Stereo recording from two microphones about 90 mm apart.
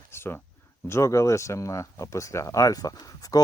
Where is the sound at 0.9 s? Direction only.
30° left (ahead or behind).